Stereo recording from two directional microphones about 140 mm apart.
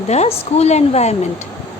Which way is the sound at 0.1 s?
50° left (ahead or behind).